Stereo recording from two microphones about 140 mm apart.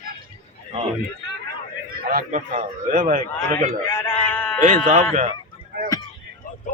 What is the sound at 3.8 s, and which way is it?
Sheep, 15° left (ahead or behind).